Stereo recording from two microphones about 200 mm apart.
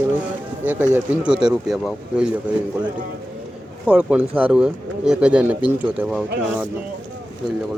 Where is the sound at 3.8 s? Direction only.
5° right (ahead or behind).